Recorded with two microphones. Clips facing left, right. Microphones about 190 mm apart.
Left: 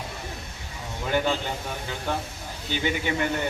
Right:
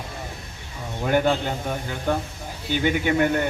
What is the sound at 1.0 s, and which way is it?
A man's voice, 50° right (ahead or behind).